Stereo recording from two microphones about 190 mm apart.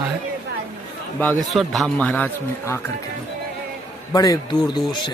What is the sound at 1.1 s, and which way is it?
A man's voice, centre (ahead or behind).